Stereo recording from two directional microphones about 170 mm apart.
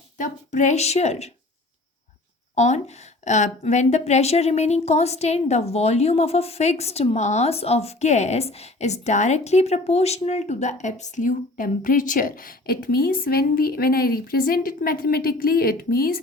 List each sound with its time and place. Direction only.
0.2 s a woman's voice: 45° left (ahead or behind)
2.6 s a woman's voice: 40° left (ahead or behind); by 16.2 s 60° left (ahead or behind)